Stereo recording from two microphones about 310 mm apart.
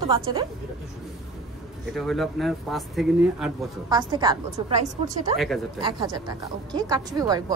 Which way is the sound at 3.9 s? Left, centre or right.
Centre.